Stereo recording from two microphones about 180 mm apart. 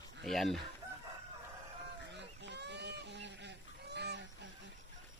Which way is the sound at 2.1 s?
75° right (ahead or behind).